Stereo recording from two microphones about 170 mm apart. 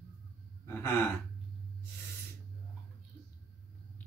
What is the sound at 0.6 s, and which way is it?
Gasp, 15° left (ahead or behind).